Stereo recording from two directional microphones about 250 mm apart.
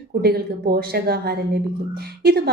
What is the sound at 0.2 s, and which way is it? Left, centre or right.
A woman's voice, right.